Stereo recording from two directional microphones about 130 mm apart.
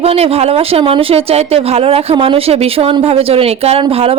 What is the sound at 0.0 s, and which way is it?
Speech, 50° right (ahead or behind).